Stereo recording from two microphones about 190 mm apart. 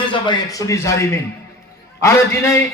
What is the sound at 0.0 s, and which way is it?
A man's voice, 25° left (ahead or behind).